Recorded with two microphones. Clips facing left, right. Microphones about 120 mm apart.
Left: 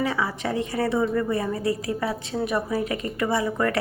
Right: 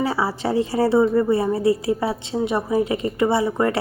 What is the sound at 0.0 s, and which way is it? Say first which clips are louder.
A woman's voice: right 4 dB; 30° right (ahead or behind).